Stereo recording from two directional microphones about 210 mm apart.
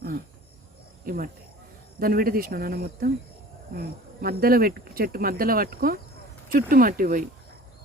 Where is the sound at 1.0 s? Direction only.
45° right (ahead or behind).